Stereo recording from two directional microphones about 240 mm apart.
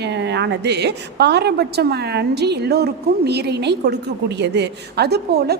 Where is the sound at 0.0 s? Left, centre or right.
Right.